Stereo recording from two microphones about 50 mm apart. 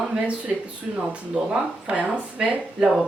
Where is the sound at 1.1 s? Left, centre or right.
Right.